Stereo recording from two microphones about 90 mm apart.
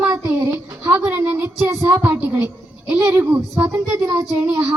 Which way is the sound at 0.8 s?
20° right (ahead or behind).